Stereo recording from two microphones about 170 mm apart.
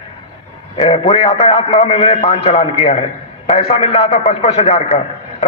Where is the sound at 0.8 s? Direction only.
30° left (ahead or behind).